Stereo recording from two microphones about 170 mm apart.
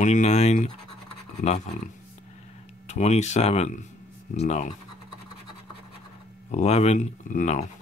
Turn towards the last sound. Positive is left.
turn(degrees=45)  # may be behind; listen again after turning